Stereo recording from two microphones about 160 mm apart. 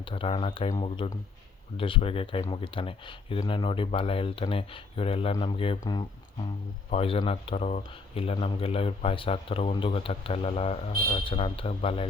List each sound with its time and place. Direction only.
0.0 s speech: 35° left (ahead or behind)